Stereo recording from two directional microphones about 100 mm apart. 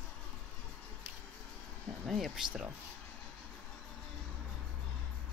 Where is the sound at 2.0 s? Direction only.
Centre (ahead or behind).